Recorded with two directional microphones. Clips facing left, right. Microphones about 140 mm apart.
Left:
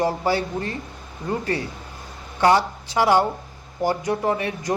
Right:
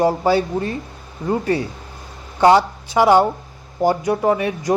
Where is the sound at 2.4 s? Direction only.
25° right (ahead or behind).